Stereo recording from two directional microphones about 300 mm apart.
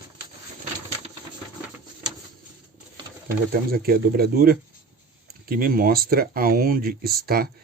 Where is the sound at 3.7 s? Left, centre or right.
Right.